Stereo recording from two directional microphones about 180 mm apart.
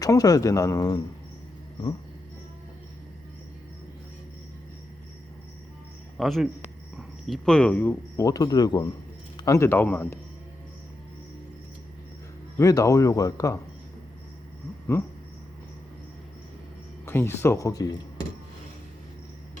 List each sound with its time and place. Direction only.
0.0 s speech: 20° left (ahead or behind)
6.1 s speech: centre (ahead or behind)
12.5 s speech: 15° left (ahead or behind)
17.1 s speech: 15° left (ahead or behind)